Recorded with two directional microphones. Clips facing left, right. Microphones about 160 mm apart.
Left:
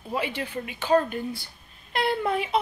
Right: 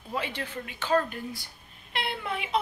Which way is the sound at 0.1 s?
10° left (ahead or behind).